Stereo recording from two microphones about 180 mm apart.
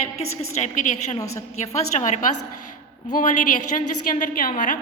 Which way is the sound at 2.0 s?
40° left (ahead or behind).